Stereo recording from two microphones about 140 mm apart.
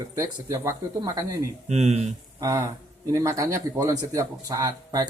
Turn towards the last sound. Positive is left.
turn(degrees=-25)  # may be behind; listen again after turning